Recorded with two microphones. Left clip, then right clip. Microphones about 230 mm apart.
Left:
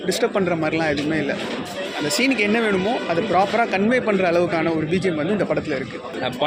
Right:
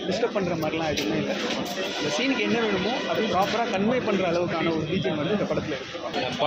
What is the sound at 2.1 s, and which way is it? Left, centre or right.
A man's voice, left.